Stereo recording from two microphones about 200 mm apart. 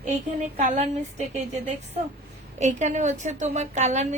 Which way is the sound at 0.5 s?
40° right (ahead or behind).